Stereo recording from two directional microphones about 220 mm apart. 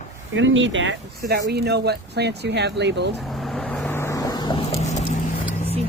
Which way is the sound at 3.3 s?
Centre (ahead or behind).